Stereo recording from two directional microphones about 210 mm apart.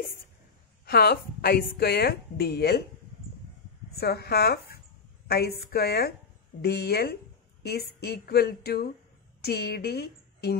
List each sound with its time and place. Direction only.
0.8 s speech: 45° left (ahead or behind)
4.0 s a woman's voice: 50° left (ahead or behind)